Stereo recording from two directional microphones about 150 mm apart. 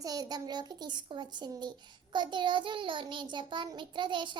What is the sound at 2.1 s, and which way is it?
Child singing, 30° right (ahead or behind).